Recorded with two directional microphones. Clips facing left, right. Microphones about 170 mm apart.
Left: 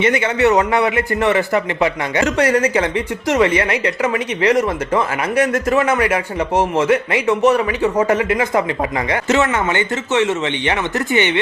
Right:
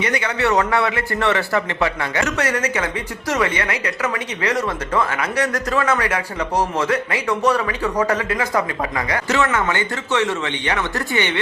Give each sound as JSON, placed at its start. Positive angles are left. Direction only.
{"t": 0.0, "sound": "a man's voice", "side_deg": 20}
{"t": 2.2, "sound": "a man's voice", "side_deg": 30}